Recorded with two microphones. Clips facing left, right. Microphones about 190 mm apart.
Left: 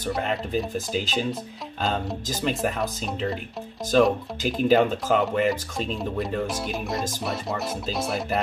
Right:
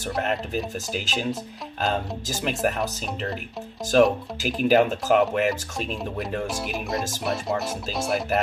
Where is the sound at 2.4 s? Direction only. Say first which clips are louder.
Right 1 dB; 5° right (ahead or behind).